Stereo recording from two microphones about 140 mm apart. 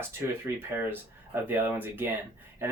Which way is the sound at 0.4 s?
15° right (ahead or behind).